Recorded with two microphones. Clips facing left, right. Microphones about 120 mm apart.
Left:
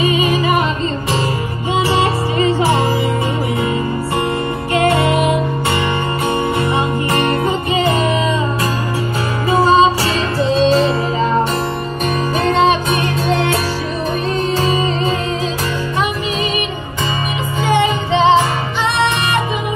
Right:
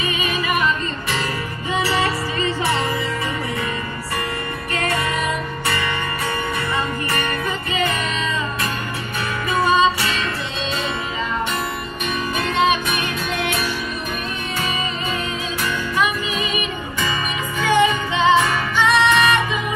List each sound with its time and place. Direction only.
0.0 s music: 25° left (ahead or behind)
1.8 s music: 25° left (ahead or behind)
4.7 s music: 25° left (ahead or behind)
7.1 s music: 25° left (ahead or behind)
9.5 s music: 30° left (ahead or behind)
12.4 s music: 35° left (ahead or behind)
17.6 s music: 30° left (ahead or behind)